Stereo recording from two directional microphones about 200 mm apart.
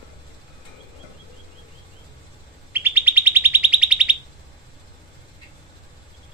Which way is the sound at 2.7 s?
10° right (ahead or behind).